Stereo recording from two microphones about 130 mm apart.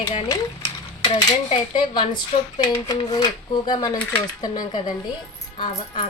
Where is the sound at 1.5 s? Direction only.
35° left (ahead or behind).